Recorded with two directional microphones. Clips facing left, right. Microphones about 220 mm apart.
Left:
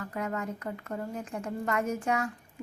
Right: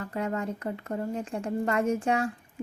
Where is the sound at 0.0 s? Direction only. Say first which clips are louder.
Right 3 dB; 30° right (ahead or behind).